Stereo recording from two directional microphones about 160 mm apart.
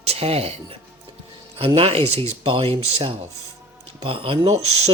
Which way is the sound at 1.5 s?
35° right (ahead or behind).